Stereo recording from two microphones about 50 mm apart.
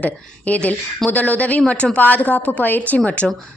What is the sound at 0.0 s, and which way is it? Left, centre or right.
A woman's voice, left.